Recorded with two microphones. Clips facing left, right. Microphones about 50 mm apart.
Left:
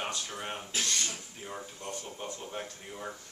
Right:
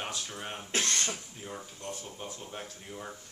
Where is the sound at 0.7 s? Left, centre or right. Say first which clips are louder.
Right 4 dB; right.